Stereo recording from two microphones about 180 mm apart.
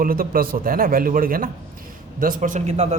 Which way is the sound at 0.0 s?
55° right (ahead or behind).